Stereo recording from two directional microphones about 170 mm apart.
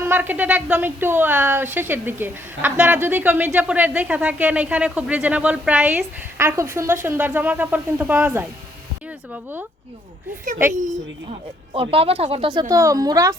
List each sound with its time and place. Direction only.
0.0 s a woman's voice: 10° right (ahead or behind)
11.3 s speech: 35° right (ahead or behind)